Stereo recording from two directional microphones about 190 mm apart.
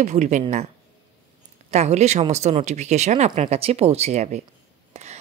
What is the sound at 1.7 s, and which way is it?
A woman's voice, 35° right (ahead or behind).